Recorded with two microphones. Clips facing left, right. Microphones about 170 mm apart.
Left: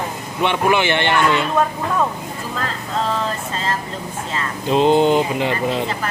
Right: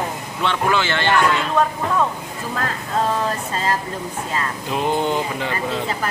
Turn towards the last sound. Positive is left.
turn(degrees=20)  # may be behind; listen again after turning